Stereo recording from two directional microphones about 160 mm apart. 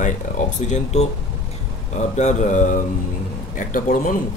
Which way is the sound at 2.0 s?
45° left (ahead or behind).